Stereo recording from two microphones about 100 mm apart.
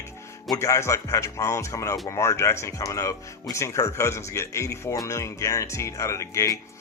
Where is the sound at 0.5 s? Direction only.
30° left (ahead or behind).